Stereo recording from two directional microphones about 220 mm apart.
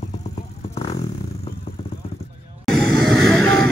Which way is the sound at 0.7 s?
30° left (ahead or behind).